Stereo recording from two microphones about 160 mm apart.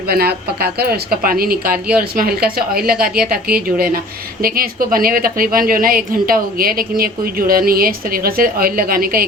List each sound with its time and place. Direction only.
0.1 s a woman's voice: 75° right (ahead or behind)